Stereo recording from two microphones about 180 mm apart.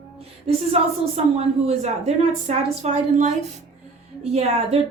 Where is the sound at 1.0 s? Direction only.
35° right (ahead or behind).